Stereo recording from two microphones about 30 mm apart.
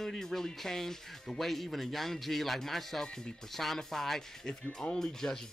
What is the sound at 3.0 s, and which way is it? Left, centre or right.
Speech, left.